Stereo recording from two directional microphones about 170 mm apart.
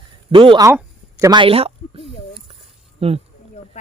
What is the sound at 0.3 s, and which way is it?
A man's voice, 30° right (ahead or behind).